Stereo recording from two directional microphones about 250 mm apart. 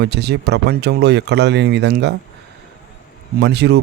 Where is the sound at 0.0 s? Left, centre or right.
Right.